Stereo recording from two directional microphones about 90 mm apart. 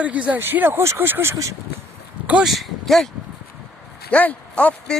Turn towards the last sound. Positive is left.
turn(degrees=15)  # may be behind; listen again after turning